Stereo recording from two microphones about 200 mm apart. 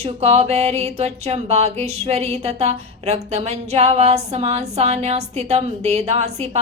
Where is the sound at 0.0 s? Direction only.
30° right (ahead or behind).